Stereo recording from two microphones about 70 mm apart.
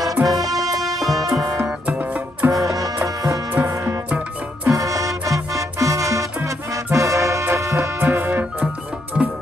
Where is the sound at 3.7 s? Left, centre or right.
Right.